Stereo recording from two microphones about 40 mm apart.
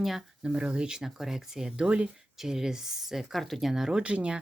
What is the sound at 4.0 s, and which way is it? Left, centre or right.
Speech, right.